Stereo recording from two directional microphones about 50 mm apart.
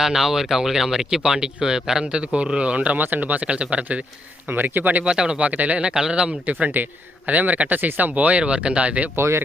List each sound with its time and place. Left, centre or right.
0.0 s speech: centre; by 3.0 s right
3.0 s speech: right
3.4 s speech: right
4.4 s speech: right
5.0 s speech: centre
5.4 s speech: right
6.4 s speech: right
9.1 s speech: right